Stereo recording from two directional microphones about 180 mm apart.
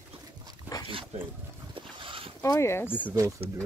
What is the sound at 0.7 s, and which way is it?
Dog, 10° right (ahead or behind).